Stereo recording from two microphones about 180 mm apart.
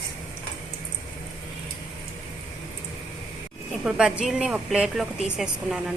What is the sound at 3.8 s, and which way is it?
Speech, 5° right (ahead or behind).